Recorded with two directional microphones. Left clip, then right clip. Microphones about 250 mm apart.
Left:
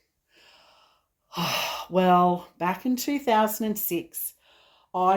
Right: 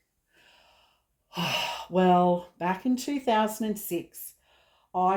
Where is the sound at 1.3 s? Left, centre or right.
Left.